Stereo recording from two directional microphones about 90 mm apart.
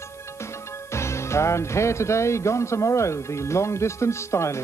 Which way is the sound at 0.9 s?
30° left (ahead or behind).